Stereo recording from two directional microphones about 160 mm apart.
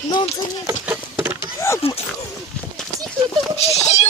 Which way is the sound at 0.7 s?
10° right (ahead or behind).